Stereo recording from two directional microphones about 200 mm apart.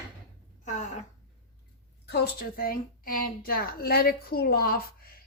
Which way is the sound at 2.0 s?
55° left (ahead or behind).